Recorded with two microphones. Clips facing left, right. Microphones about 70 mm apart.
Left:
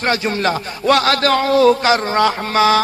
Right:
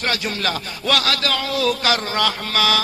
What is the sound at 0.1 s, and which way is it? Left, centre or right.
A man's voice, left.